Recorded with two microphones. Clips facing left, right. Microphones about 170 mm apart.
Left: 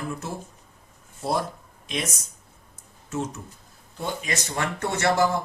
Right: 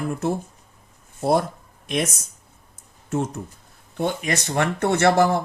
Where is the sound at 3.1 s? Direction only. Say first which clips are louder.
Right 5 dB; 55° right (ahead or behind).